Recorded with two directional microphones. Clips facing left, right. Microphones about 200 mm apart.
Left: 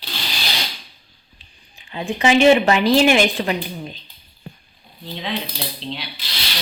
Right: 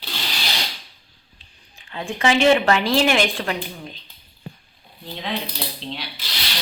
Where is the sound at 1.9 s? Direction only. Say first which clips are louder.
Left 3 dB; 15° left (ahead or behind).